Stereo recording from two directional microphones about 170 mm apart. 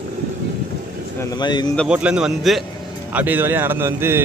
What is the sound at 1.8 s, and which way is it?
A man's voice, 5° right (ahead or behind).